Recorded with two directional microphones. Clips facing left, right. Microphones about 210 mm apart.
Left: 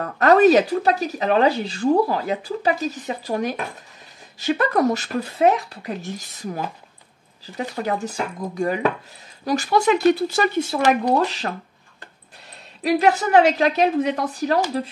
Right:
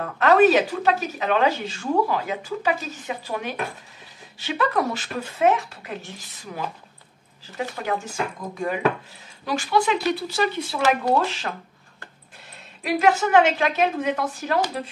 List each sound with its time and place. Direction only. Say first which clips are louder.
0.0 s speech: left 2 dB; 40° left (ahead or behind)
7.7 s speech: left 4 dB; 35° left (ahead or behind)
12.8 s speech: left 2 dB; 35° left (ahead or behind)